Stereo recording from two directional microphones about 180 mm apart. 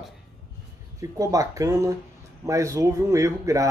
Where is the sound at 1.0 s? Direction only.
20° right (ahead or behind).